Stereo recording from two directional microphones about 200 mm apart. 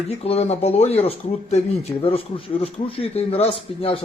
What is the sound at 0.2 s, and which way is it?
Speech, 30° left (ahead or behind).